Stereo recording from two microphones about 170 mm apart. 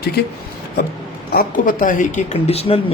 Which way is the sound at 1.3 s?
60° left (ahead or behind).